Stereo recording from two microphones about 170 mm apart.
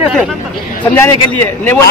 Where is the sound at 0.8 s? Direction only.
15° left (ahead or behind).